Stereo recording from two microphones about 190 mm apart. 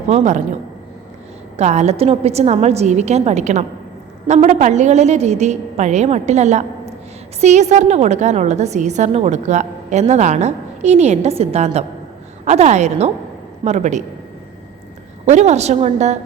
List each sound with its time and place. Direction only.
0.1 s a woman's voice: 35° right (ahead or behind)
1.5 s a woman's voice: 35° right (ahead or behind)
15.3 s a woman's voice: 35° right (ahead or behind)